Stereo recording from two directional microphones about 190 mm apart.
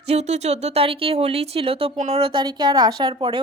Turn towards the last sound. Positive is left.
turn(degrees=-25)  # may be behind; listen again after turning